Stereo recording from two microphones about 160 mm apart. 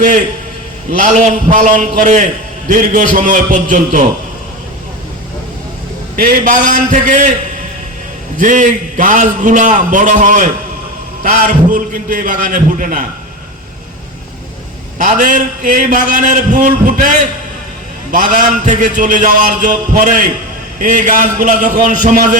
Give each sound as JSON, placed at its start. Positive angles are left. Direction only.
{"t": 0.9, "sound": "a man's voice", "side_deg": -55}
{"t": 6.1, "sound": "a man's voice", "side_deg": -60}
{"t": 8.4, "sound": "a man's voice", "side_deg": -55}
{"t": 14.9, "sound": "a man's voice", "side_deg": -55}